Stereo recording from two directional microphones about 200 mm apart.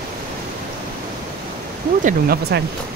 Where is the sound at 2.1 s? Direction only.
50° right (ahead or behind).